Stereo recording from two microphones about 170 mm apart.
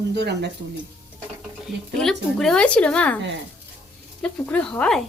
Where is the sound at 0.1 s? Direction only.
80° right.